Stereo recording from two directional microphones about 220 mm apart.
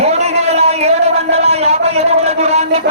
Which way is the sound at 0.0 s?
30° right (ahead or behind).